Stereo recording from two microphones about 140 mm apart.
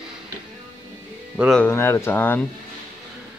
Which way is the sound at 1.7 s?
20° left (ahead or behind).